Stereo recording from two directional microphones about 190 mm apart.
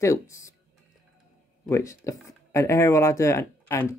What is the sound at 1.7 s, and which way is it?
Speech, 15° left (ahead or behind).